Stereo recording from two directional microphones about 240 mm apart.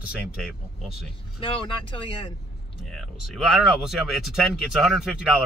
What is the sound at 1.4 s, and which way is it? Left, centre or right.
Speech, left.